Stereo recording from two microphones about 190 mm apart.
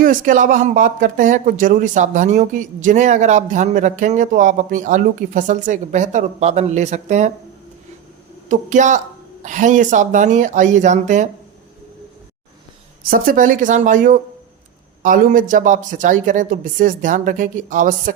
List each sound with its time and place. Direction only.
0.0 s speech: 45° right (ahead or behind)
8.4 s speech: 40° right (ahead or behind)
13.1 s speech: 45° right (ahead or behind)